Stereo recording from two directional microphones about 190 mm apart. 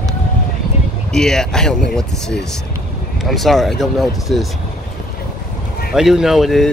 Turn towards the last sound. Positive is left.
turn(degrees=0)  # may be behind; listen again after turning